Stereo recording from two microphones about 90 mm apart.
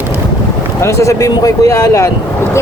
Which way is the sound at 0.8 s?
35° left (ahead or behind).